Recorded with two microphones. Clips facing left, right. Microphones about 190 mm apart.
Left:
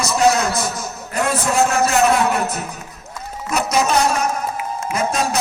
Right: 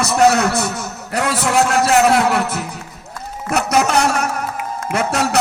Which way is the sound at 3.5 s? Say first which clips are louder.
Right 2 dB; 65° right (ahead or behind).